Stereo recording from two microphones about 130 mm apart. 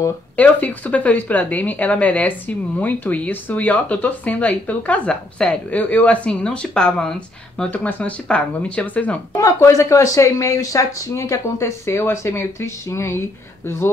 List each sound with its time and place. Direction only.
0.4 s a woman's voice: 10° left (ahead or behind)
9.4 s speech: 25° left (ahead or behind)